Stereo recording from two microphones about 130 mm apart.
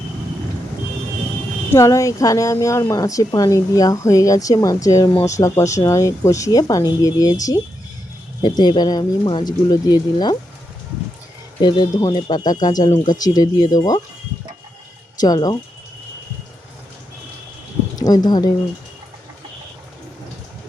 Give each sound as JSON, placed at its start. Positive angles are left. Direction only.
{"t": 1.7, "sound": "a woman's voice", "side_deg": 25}
{"t": 8.4, "sound": "speech", "side_deg": 35}
{"t": 11.6, "sound": "a woman's voice", "side_deg": 35}
{"t": 15.2, "sound": "speech", "side_deg": 30}
{"t": 17.9, "sound": "speech", "side_deg": 30}